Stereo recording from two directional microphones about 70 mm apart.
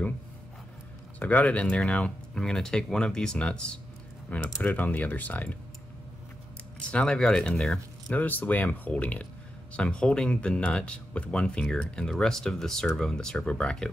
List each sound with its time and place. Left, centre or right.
1.2 s speech: centre
4.6 s speech: left
6.9 s speech: centre
8.1 s speech: left